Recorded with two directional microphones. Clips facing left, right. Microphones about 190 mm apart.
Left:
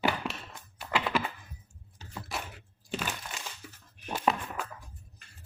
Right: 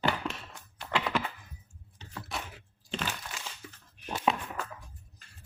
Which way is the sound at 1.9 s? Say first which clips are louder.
Left 1 dB; 5° left (ahead or behind).